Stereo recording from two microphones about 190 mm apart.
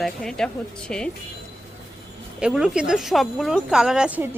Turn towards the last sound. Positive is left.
turn(degrees=-5)  # may be behind; listen again after turning